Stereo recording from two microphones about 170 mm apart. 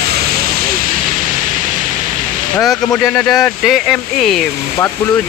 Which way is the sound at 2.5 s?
Centre (ahead or behind).